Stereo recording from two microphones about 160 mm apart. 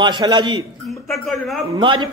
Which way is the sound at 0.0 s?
30° right (ahead or behind).